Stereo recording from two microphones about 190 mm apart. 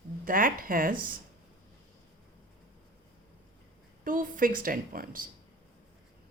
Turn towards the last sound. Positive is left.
turn(degrees=-50)  # may be behind; listen again after turning